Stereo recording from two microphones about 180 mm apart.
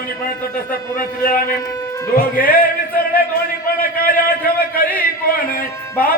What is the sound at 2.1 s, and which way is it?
Speech, 50° left (ahead or behind).